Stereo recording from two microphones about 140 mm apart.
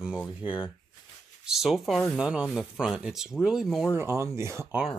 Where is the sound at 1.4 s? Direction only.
5° right (ahead or behind).